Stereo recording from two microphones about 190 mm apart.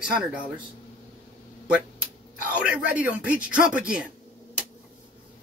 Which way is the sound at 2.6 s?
5° right (ahead or behind).